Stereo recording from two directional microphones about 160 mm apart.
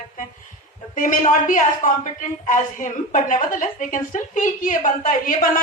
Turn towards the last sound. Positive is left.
turn(degrees=55)  # may be behind; listen again after turning